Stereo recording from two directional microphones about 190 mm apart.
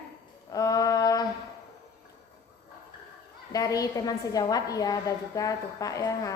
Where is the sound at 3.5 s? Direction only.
20° left (ahead or behind).